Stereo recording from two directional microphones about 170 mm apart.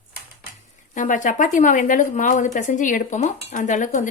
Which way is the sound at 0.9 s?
50° left (ahead or behind).